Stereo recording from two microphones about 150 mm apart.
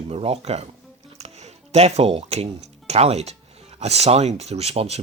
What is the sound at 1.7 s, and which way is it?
Speech, 45° right (ahead or behind).